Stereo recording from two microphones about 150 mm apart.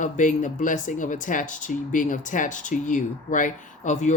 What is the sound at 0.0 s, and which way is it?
Speech, 55° left (ahead or behind).